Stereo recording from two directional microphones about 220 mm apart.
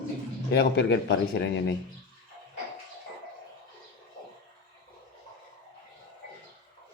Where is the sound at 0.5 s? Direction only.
50° left (ahead or behind).